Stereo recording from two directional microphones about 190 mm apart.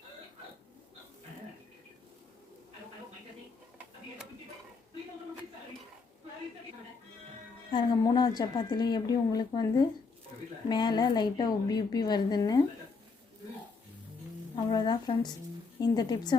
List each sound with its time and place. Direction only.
7.7 s a woman's voice: 25° left (ahead or behind)
14.5 s a woman's voice: 20° left (ahead or behind)